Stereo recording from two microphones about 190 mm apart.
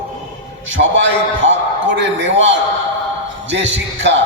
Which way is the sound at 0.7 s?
75° right (ahead or behind).